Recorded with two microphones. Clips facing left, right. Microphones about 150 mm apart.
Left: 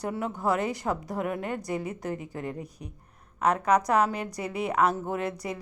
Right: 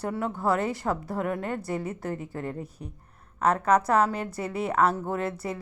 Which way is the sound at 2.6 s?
30° right (ahead or behind).